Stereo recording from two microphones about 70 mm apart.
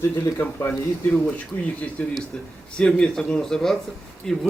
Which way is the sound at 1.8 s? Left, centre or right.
Left.